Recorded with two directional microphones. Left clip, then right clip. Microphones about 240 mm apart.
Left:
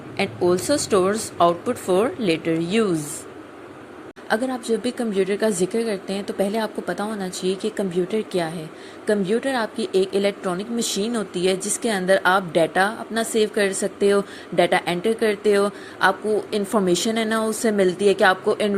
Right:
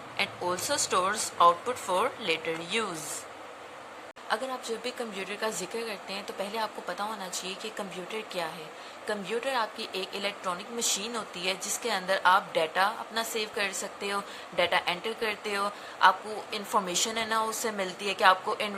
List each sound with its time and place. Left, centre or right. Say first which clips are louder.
0.2 s a woman's voice: left 9 dB; centre
4.8 s a woman's voice: left 12 dB; centre